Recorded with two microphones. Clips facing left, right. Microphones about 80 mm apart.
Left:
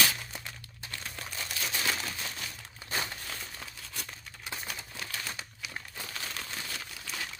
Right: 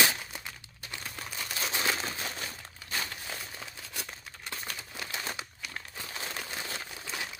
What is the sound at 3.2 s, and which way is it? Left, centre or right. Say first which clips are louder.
Crumpling: right 1 dB; centre.